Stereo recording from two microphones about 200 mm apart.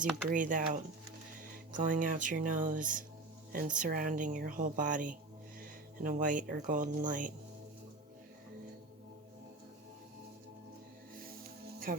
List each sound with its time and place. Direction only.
0.3 s speech: 40° right (ahead or behind)
11.9 s speech: 45° right (ahead or behind)